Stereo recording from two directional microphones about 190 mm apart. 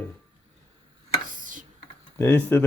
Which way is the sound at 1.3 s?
45° right (ahead or behind).